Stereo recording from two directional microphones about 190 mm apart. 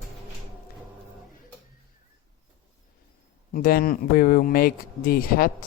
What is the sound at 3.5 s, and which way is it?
Speech, 50° left (ahead or behind).